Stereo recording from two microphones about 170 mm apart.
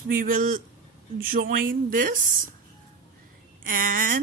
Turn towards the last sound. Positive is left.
turn(degrees=-55)  # may be behind; listen again after turning